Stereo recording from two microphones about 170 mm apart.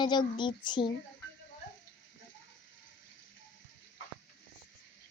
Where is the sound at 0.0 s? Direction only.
25° left (ahead or behind).